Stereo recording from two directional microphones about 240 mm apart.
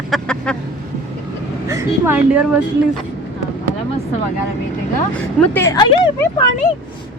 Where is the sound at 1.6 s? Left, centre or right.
Centre.